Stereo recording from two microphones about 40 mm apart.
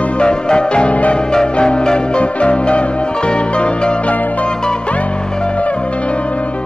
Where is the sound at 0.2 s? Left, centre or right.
Left.